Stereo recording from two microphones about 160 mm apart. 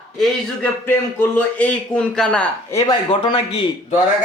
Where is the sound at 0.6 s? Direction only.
10° left (ahead or behind).